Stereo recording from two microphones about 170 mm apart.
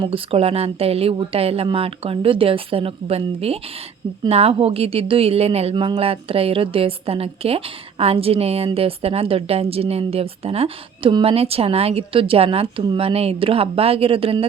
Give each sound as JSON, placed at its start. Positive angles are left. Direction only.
{"t": 0.0, "sound": "a woman's voice", "side_deg": -35}